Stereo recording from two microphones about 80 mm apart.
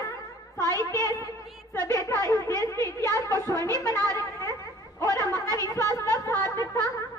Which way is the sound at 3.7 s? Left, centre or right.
Right.